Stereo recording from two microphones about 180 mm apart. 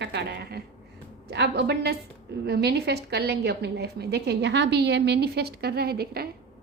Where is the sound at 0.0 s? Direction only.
65° right (ahead or behind).